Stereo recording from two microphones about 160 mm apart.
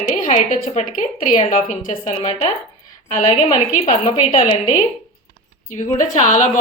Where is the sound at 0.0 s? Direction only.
45° left (ahead or behind).